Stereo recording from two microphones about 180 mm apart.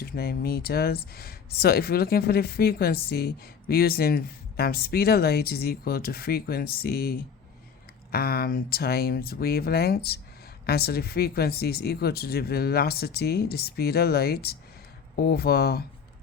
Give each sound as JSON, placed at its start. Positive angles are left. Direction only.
{"t": 0.0, "sound": "speech", "side_deg": 60}